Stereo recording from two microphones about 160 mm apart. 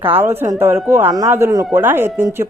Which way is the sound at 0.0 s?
15° right (ahead or behind).